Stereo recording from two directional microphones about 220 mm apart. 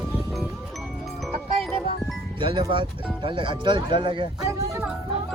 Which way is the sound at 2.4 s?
20° right (ahead or behind).